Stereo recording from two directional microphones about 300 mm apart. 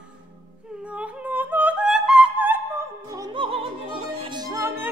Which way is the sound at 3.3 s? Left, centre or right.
Centre.